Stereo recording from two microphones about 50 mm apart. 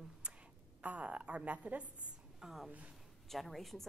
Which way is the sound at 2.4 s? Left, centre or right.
Centre.